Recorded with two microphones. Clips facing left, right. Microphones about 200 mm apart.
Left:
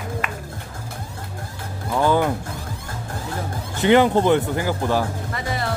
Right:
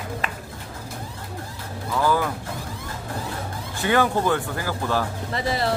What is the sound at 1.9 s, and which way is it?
Music, 25° left (ahead or behind).